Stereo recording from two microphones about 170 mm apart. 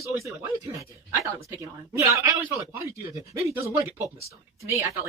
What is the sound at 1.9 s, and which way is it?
A man's voice, 15° right (ahead or behind).